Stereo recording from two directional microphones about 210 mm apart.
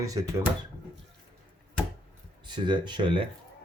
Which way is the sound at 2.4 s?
20° right (ahead or behind).